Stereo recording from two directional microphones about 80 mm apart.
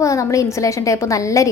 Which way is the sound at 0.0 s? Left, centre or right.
Left.